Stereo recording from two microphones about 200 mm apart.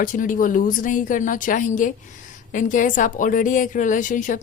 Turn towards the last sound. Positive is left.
turn(degrees=40)  # may be behind; listen again after turning